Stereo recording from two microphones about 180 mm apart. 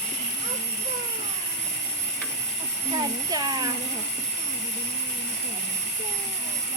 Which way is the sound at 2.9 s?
25° right (ahead or behind).